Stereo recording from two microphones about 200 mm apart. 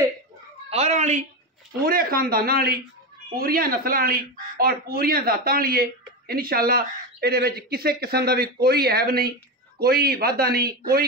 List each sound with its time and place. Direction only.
0.7 s cat: 35° right (ahead or behind)
1.8 s speech: 45° right (ahead or behind)